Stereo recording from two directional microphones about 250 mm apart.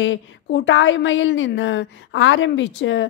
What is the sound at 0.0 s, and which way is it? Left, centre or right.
A woman's voice, left.